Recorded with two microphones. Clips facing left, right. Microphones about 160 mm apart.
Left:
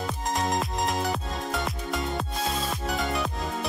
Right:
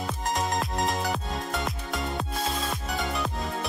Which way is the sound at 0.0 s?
Centre (ahead or behind).